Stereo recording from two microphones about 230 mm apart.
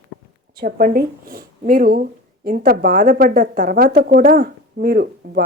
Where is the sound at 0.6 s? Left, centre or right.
Right.